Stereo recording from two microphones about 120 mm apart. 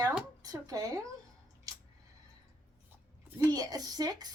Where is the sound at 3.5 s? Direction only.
30° right (ahead or behind).